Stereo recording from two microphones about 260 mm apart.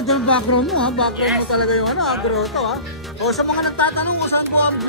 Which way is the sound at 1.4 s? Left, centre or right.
Left.